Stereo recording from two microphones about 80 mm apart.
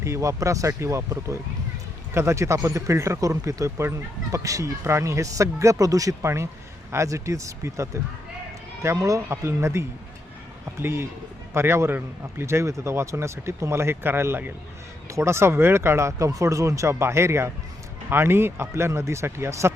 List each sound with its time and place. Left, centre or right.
0.0 s a man's voice: right